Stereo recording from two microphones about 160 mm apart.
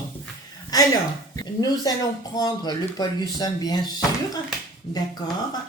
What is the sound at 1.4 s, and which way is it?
Speech, 25° left (ahead or behind).